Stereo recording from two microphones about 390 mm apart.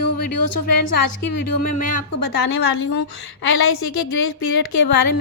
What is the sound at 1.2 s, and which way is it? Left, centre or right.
Speech, left.